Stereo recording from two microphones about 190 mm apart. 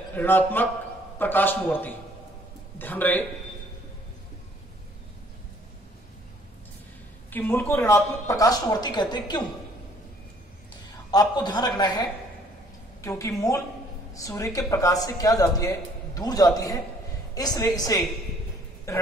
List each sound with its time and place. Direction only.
0.1 s a woman's voice: 10° left (ahead or behind)
7.2 s a woman's voice: 10° left (ahead or behind)
11.1 s a man's voice: 20° left (ahead or behind)